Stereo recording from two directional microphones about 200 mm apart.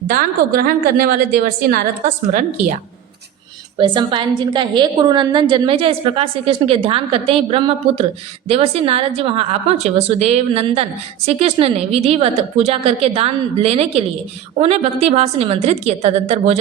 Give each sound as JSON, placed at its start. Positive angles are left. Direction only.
{"t": 0.1, "sound": "a woman's voice", "side_deg": -50}
{"t": 3.8, "sound": "a woman's voice", "side_deg": -25}